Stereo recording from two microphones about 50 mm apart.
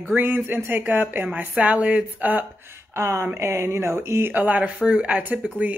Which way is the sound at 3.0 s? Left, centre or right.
Right.